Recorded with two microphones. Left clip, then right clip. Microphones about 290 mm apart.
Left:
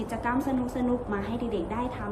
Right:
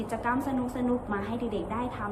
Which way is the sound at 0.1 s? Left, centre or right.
Centre.